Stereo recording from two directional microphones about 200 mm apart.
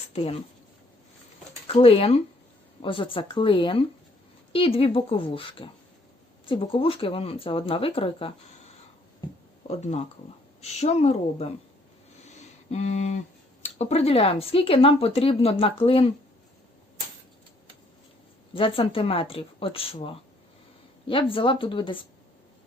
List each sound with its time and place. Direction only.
0.1 s speech: 30° left (ahead or behind)
1.6 s a woman's voice: 30° left (ahead or behind)
12.2 s a sound: 35° left (ahead or behind)
13.7 s speech: 30° left (ahead or behind)
18.5 s speech: 25° left (ahead or behind)